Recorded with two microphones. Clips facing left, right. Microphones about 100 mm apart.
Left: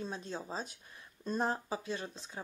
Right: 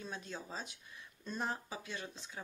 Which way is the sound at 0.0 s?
30° left (ahead or behind).